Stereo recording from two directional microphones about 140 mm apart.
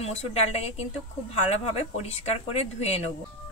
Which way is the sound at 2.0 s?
50° left (ahead or behind).